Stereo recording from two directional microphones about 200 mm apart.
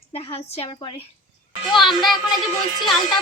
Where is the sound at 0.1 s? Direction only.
30° left (ahead or behind).